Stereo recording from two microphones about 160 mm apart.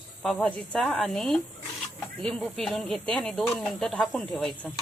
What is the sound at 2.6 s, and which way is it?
Speech, centre (ahead or behind).